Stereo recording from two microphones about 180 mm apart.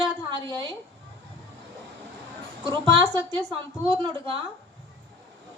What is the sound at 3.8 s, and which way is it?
Speech, 30° right (ahead or behind).